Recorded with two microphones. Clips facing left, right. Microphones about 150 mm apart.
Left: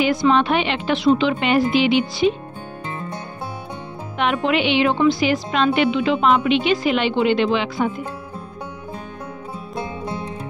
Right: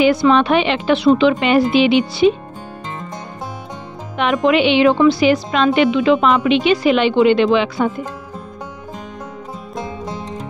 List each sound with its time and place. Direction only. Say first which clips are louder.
0.0 s speech: right 4 dB; 80° right
4.2 s a woman's voice: right 5 dB; 90° right